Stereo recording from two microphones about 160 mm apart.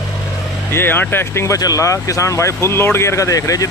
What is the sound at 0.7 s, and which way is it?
Speech, 15° left (ahead or behind).